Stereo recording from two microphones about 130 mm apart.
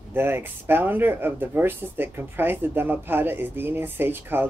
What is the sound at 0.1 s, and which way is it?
Speech, 15° right (ahead or behind).